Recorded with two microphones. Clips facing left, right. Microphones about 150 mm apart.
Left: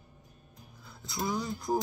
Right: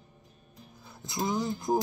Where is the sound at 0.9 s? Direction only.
20° right (ahead or behind).